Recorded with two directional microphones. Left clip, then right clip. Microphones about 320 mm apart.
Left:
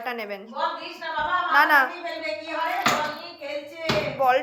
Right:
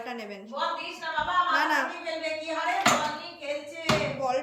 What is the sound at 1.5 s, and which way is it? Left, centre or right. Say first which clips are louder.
Speech: left 7 dB; centre.